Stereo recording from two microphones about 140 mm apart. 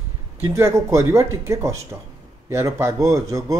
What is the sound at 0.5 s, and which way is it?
Speech, 20° right (ahead or behind).